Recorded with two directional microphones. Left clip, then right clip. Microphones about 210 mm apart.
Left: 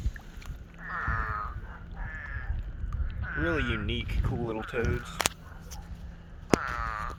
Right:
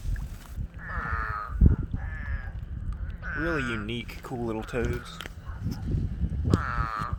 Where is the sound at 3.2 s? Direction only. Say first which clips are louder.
Right 1 dB; 40° right (ahead or behind).